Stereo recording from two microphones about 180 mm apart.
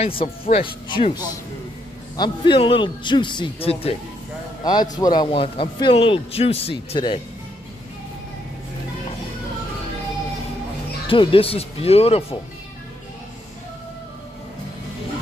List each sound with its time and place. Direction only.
0.0 s a man's voice: 35° left (ahead or behind)
11.1 s speech: 30° left (ahead or behind)